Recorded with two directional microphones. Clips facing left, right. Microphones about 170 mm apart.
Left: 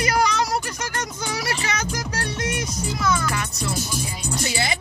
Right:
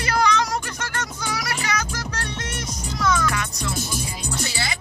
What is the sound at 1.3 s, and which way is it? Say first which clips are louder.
Music: even; 25° left (ahead or behind).